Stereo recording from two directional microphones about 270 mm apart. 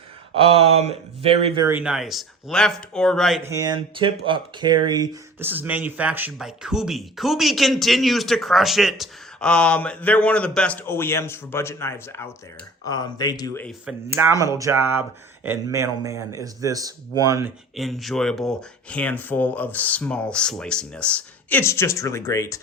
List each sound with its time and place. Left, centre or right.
0.3 s speech: right
1.6 s speech: centre
3.5 s speech: centre
13.7 s speech: centre
17.7 s speech: centre